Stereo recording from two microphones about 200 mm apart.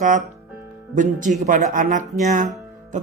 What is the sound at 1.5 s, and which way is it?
A man's voice, 40° right (ahead or behind).